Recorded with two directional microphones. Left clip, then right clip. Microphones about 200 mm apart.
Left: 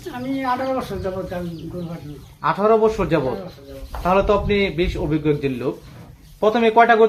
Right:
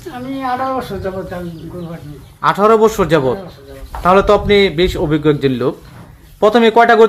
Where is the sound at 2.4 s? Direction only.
50° right (ahead or behind).